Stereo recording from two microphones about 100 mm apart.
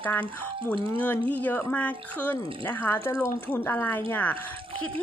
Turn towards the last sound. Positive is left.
turn(degrees=15)  # may be behind; listen again after turning